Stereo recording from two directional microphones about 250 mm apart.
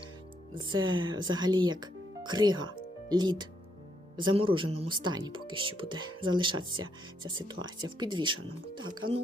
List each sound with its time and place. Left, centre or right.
0.5 s speech: centre